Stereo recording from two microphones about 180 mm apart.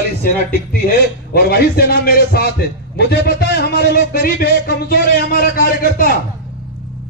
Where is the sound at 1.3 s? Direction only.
60° left (ahead or behind).